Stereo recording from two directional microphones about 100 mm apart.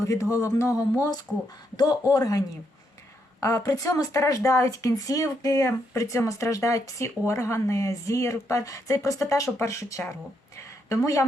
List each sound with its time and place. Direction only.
0.0 s a woman's voice: 30° left (ahead or behind)
3.4 s a woman's voice: 35° left (ahead or behind)